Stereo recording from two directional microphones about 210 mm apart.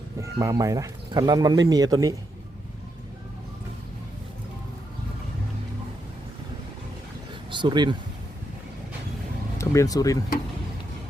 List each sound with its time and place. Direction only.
0.2 s speech: 15° right (ahead or behind)
7.5 s speech: 20° right (ahead or behind)
9.6 s speech: 15° left (ahead or behind)